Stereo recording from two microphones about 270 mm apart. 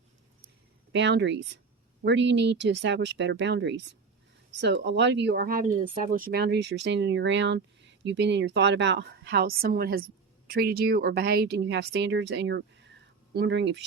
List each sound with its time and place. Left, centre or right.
0.9 s speech: right